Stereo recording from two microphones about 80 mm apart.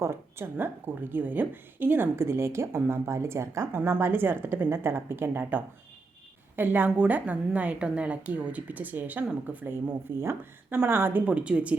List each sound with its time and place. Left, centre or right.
0.0 s a woman's voice: right
3.8 s a woman's voice: right
10.2 s a woman's voice: right